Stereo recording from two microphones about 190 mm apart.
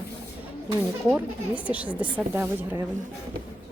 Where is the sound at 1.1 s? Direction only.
5° right (ahead or behind).